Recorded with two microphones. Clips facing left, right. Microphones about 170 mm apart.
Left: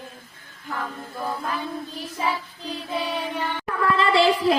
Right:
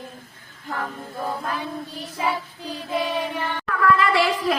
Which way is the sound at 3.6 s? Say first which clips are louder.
Right 2 dB; 25° left (ahead or behind).